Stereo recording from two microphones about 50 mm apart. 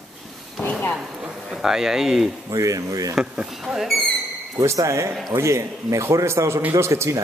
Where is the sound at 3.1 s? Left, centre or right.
Right.